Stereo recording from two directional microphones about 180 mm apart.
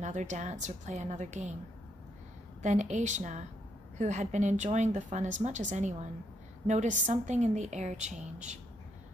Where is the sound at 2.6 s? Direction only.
40° right (ahead or behind).